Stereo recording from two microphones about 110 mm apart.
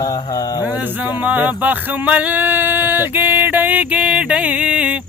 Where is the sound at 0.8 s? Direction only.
15° right (ahead or behind).